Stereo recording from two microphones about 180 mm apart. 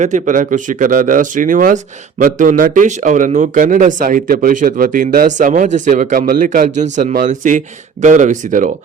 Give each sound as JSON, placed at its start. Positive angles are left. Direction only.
{"t": 0.0, "sound": "speech", "side_deg": -45}